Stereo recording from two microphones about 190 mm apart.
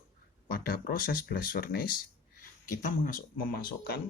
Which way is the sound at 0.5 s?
50° left (ahead or behind).